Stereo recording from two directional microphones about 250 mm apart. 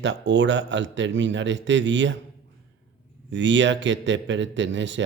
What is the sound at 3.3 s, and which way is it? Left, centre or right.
Speech, right.